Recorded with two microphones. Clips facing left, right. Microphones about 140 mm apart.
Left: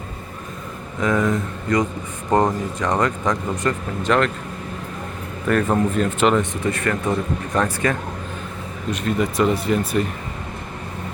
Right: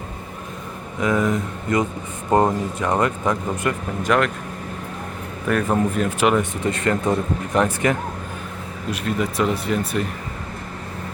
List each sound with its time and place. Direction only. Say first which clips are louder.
0.9 s speech: even; 20° right (ahead or behind)
2.3 s speech: right 1 dB; 10° right (ahead or behind)
5.5 s speech: left 1 dB; 5° right (ahead or behind)
6.7 s speech: right 4 dB; 20° right (ahead or behind)
8.9 s speech: left 2 dB; 5° right (ahead or behind)